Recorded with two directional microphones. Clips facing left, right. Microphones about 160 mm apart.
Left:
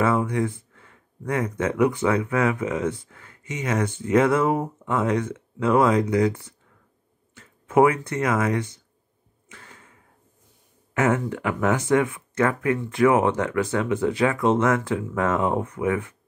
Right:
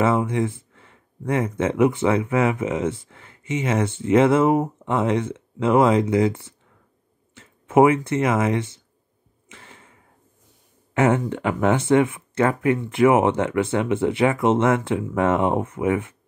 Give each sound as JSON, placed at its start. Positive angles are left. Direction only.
{"t": 0.0, "sound": "speech", "side_deg": -25}
{"t": 9.5, "sound": "a sound", "side_deg": -25}
{"t": 11.0, "sound": "speech", "side_deg": -25}